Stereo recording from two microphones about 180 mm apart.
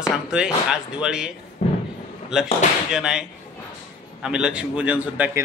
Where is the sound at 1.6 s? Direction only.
35° left (ahead or behind).